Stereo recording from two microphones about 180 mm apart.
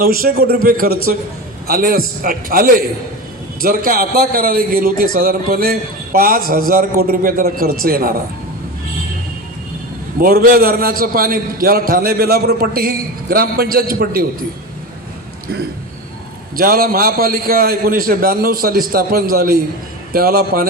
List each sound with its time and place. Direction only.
0.0 s a man's voice: 55° right (ahead or behind)
10.2 s a man's voice: 55° right (ahead or behind)
16.6 s a man's voice: 55° right (ahead or behind)